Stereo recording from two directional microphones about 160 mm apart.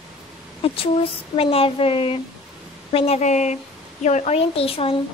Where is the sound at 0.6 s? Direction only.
35° left (ahead or behind).